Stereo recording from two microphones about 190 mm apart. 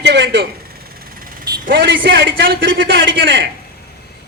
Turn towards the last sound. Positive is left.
turn(degrees=-60)  # may be behind; listen again after turning